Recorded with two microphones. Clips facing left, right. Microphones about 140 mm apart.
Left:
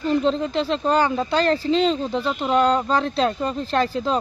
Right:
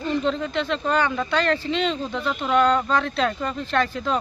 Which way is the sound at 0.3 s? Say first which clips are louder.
Left 3 dB; 30° left (ahead or behind).